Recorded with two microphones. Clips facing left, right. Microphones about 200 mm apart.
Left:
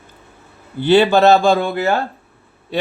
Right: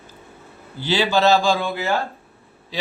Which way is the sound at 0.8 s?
55° left (ahead or behind).